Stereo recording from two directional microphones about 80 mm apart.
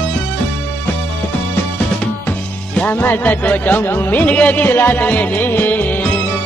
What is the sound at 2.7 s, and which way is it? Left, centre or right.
Speech, centre.